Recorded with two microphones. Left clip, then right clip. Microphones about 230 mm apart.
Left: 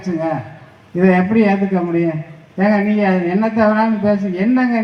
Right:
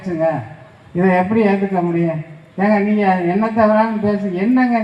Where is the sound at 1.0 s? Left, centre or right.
Left.